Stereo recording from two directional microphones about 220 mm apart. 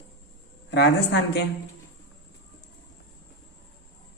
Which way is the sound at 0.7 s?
50° left (ahead or behind).